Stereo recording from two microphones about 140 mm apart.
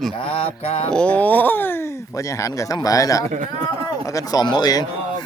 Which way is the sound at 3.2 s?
65° right (ahead or behind).